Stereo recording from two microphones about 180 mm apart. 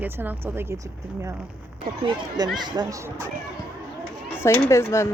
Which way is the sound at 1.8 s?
30° right (ahead or behind).